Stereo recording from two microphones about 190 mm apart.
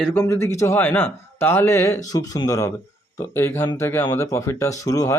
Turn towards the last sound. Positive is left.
turn(degrees=20)  # may be behind; listen again after turning